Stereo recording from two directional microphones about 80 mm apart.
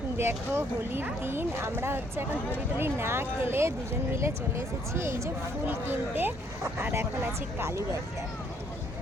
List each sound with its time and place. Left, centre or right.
0.2 s speech: right